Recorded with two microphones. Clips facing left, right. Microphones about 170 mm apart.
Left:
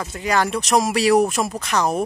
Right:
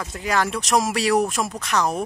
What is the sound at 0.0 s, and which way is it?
Speech, centre (ahead or behind).